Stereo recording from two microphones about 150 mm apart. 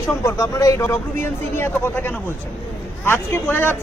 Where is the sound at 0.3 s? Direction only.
20° left (ahead or behind).